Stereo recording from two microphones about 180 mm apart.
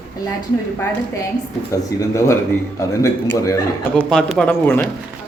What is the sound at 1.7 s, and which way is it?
Speech, 15° left (ahead or behind).